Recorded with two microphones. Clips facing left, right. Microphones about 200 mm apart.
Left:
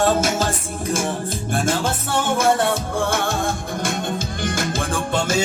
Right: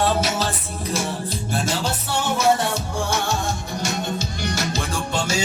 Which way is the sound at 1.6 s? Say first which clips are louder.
Left 3 dB; 50° left (ahead or behind).